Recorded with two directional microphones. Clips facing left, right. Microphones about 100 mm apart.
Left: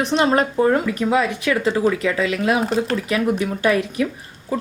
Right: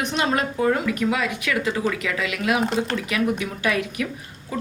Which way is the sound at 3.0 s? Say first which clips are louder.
Left 4 dB; 35° left (ahead or behind).